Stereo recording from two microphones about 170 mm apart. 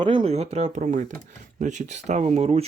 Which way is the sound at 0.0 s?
30° right (ahead or behind).